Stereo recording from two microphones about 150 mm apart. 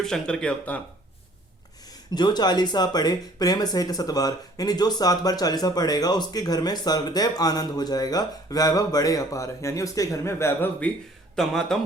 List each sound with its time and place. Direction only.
0.0 s speech: 5° left (ahead or behind)
2.1 s speech: 30° left (ahead or behind); by 11.8 s 5° left (ahead or behind)